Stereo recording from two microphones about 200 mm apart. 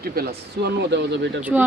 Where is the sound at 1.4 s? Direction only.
10° right (ahead or behind).